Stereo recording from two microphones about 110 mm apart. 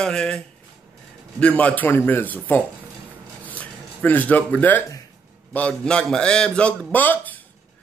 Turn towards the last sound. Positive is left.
turn(degrees=15)  # may be behind; listen again after turning